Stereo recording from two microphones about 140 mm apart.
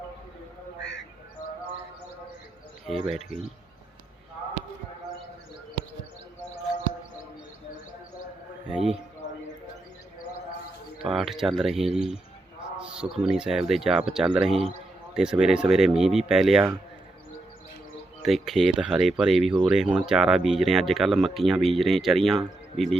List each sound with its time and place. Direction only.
2.8 s speech: centre (ahead or behind)
8.7 s a man's voice: 5° right (ahead or behind)
11.0 s speech: centre (ahead or behind)
18.2 s speech: centre (ahead or behind)